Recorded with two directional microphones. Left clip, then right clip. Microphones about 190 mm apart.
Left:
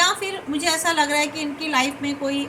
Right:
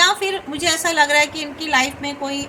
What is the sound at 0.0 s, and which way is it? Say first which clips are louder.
A woman's voice: right 4 dB; 45° right (ahead or behind).